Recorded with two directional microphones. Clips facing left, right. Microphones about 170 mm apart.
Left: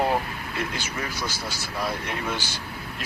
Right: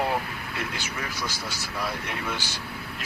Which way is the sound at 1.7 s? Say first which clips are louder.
Left 3 dB; 35° left (ahead or behind).